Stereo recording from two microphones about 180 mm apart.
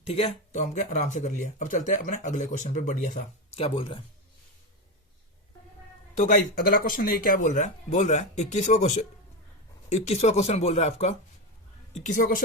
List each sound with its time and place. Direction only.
0.0 s speech: 35° left (ahead or behind)
6.1 s speech: 45° left (ahead or behind)